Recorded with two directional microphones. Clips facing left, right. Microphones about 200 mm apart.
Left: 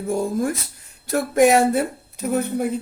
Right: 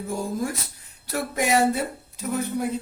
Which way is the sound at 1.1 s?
50° left (ahead or behind).